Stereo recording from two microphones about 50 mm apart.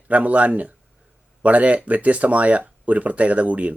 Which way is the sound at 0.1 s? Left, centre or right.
Right.